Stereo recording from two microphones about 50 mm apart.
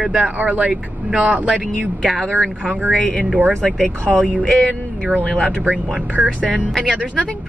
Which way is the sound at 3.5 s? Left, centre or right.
Centre.